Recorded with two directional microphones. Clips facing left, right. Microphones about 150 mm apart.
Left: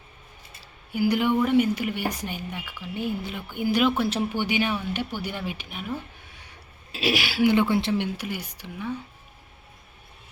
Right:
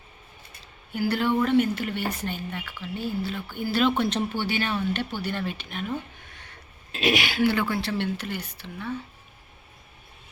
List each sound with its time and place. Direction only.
0.6 s speech: 10° left (ahead or behind)
7.4 s speech: 20° left (ahead or behind)